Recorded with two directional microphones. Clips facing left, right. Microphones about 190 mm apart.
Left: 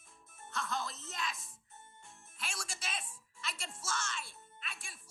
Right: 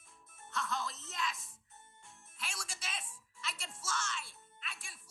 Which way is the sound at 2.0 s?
50° left (ahead or behind).